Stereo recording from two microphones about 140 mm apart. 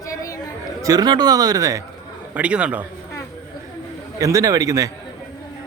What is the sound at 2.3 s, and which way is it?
Speech, 10° right (ahead or behind).